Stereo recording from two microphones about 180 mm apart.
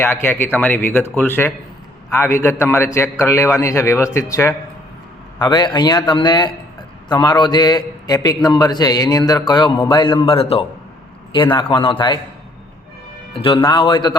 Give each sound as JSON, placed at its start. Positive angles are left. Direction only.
{"t": 0.0, "sound": "a man's voice", "side_deg": 10}
{"t": 13.3, "sound": "a man's voice", "side_deg": 30}